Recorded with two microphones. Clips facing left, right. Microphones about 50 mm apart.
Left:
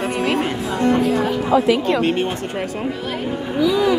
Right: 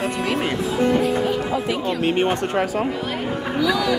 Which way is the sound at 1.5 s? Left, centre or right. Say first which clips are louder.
Left 7 dB; left.